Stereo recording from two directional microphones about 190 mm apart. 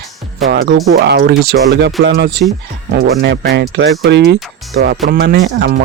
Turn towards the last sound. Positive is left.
turn(degrees=-65)  # may be behind; listen again after turning